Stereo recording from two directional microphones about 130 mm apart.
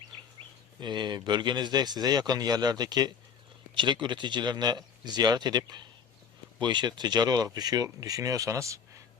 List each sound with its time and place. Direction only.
0.8 s speech: 35° right (ahead or behind)